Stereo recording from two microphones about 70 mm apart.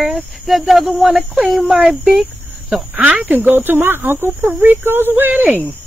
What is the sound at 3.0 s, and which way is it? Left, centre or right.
Speech, right.